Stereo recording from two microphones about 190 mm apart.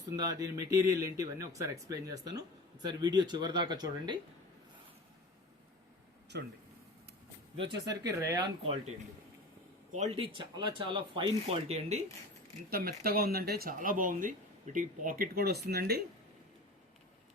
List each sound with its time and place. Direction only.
0.2 s speech: 20° right (ahead or behind)
6.3 s speech: 60° right (ahead or behind)
7.5 s speech: 25° right (ahead or behind)
9.9 s speech: 35° right (ahead or behind)
12.7 s speech: 55° right (ahead or behind)